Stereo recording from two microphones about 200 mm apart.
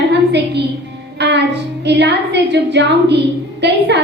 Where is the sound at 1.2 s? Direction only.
60° right (ahead or behind).